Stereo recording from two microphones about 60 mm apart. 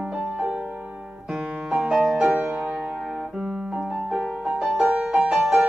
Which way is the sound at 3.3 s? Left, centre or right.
Centre.